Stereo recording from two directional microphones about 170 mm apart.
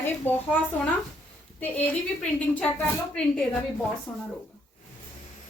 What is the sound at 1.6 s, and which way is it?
A woman's voice, 10° left (ahead or behind).